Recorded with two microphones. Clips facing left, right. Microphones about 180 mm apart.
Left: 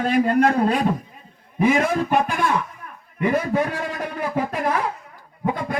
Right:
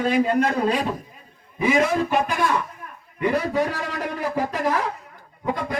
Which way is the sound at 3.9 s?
50° left (ahead or behind).